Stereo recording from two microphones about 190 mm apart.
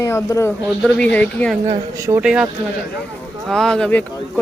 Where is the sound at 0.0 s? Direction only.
15° left (ahead or behind).